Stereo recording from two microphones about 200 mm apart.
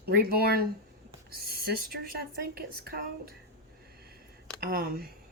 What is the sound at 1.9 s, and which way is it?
Speech, 50° right (ahead or behind).